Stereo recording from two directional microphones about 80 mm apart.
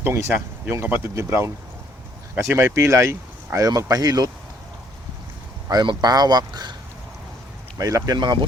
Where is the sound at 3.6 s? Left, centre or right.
Right.